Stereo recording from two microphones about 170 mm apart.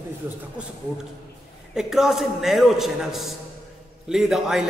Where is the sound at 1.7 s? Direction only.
5° right (ahead or behind).